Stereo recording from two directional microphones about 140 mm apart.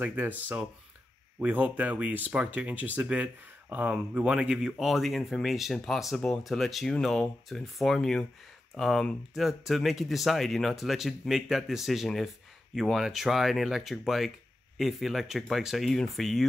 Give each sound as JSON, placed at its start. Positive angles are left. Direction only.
{"t": 0.0, "sound": "speech", "side_deg": -10}